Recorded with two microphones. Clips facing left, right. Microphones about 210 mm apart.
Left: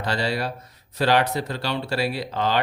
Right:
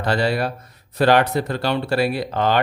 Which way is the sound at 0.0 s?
50° right (ahead or behind).